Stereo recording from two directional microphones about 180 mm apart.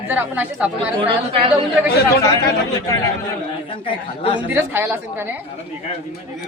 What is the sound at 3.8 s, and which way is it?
Speech, 30° left (ahead or behind).